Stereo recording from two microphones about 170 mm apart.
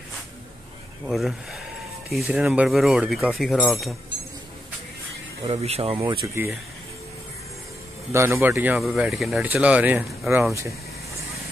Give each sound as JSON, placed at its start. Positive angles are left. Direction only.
{"t": 1.0, "sound": "speech", "side_deg": 0}
{"t": 5.4, "sound": "speech", "side_deg": -35}
{"t": 6.2, "sound": "speech", "side_deg": -15}
{"t": 8.1, "sound": "speech", "side_deg": -15}